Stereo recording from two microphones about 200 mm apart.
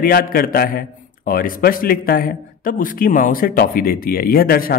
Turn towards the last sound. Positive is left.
turn(degrees=50)  # may be behind; listen again after turning